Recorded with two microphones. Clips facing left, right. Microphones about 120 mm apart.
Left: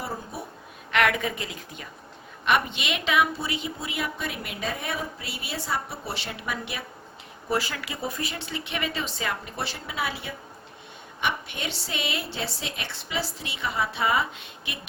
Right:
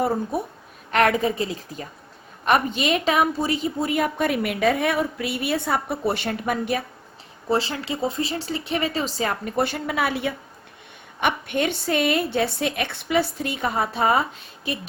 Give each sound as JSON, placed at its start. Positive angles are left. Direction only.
{"t": 0.3, "sound": "a woman's voice", "side_deg": -50}
{"t": 0.9, "sound": "a woman's voice", "side_deg": -35}
{"t": 7.5, "sound": "speech", "side_deg": -25}
{"t": 9.4, "sound": "a woman's voice", "side_deg": -50}